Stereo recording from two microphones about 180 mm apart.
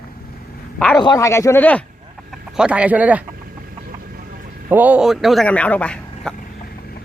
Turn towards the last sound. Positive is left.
turn(degrees=5)  # may be behind; listen again after turning